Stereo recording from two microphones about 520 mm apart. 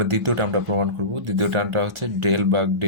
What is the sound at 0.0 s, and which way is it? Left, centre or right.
Speech, right.